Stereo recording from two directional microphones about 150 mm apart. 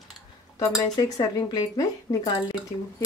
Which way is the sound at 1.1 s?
25° left (ahead or behind).